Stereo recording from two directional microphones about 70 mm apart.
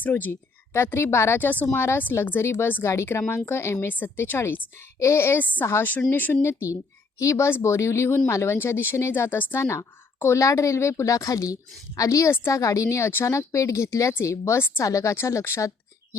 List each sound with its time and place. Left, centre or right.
0.0 s speech: left
1.4 s speech: left
6.1 s speech: left
14.8 s speech: left